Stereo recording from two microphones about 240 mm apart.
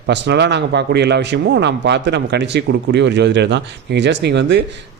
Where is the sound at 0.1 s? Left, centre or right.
Right.